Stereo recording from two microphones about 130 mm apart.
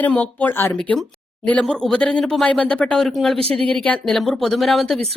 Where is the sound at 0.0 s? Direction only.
10° left (ahead or behind).